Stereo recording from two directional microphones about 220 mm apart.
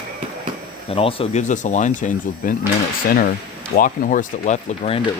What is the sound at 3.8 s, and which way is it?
Speech, 35° left (ahead or behind).